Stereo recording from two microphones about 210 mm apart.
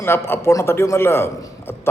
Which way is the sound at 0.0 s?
10° left (ahead or behind).